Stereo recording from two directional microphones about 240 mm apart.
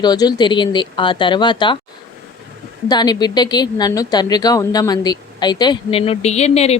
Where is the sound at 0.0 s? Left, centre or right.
Centre.